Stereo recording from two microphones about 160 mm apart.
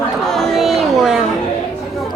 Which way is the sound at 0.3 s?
Centre (ahead or behind).